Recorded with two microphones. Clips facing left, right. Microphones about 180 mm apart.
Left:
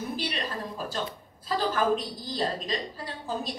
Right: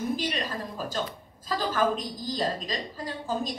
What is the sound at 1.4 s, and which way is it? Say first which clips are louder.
A woman's voice: even; 45° right (ahead or behind).